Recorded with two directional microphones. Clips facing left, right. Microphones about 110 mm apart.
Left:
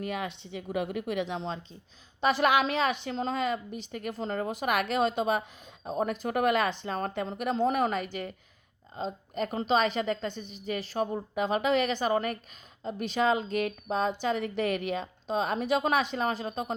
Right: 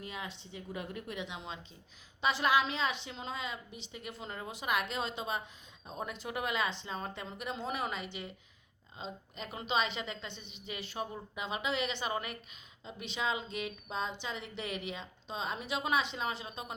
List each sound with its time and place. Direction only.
0.0 s speech: 65° left (ahead or behind)
2.2 s a woman's voice: 55° left (ahead or behind)